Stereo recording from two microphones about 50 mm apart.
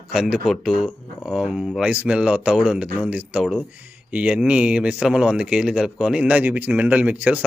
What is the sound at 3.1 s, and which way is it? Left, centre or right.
Speech, right.